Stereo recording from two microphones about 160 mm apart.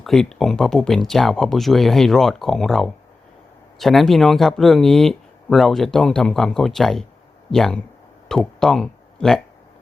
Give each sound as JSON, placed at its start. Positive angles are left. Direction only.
{"t": 0.0, "sound": "speech", "side_deg": 0}